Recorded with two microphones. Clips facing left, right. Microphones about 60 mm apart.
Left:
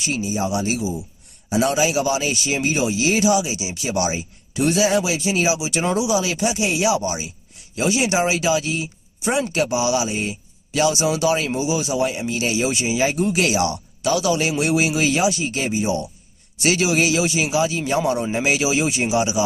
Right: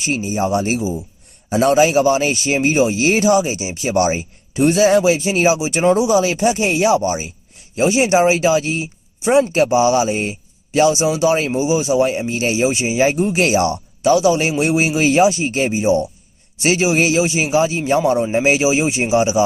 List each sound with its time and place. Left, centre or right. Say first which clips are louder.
0.0 s a man's voice: right 4 dB; right